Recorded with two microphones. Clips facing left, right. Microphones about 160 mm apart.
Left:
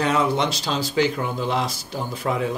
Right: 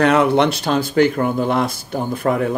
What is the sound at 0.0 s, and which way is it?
Speech, 65° right (ahead or behind).